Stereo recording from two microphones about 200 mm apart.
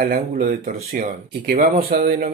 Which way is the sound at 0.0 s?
45° right (ahead or behind).